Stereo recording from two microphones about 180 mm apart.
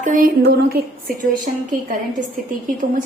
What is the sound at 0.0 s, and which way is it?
A woman's voice, 50° right (ahead or behind).